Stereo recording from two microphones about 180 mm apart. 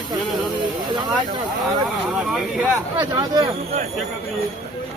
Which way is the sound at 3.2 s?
20° right (ahead or behind).